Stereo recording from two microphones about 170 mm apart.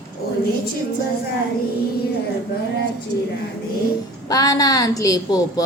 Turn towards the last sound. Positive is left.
turn(degrees=20)  # may be behind; listen again after turning